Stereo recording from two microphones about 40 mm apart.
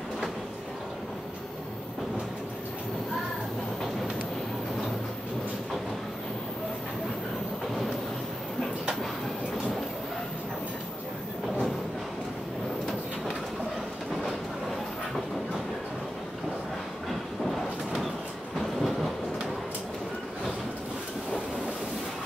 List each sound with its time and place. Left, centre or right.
18.6 s train: centre